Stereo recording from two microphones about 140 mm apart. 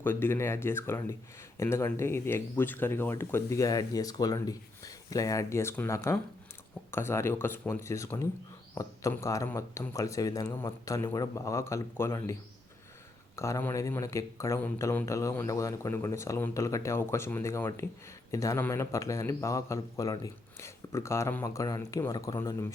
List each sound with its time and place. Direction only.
0.0 s speech: 15° left (ahead or behind)